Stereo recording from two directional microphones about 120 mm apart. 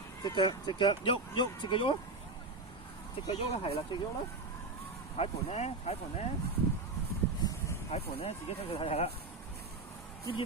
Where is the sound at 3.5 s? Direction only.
55° left (ahead or behind).